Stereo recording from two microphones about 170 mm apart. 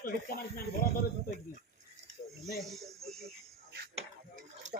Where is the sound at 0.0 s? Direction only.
60° left (ahead or behind).